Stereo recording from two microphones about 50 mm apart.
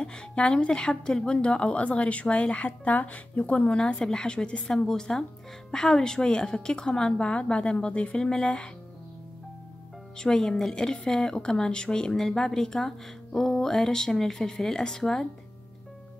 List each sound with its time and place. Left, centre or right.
0.0 s speech: centre
10.1 s speech: centre